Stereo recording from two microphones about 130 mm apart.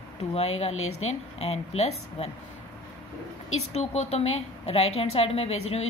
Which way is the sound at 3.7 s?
60° left (ahead or behind).